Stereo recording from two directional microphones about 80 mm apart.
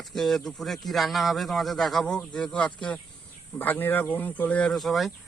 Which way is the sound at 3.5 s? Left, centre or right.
Left.